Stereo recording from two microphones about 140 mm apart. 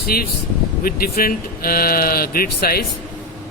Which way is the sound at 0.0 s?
90° left.